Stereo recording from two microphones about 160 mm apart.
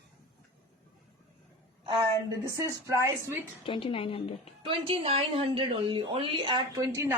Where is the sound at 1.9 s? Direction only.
20° right (ahead or behind).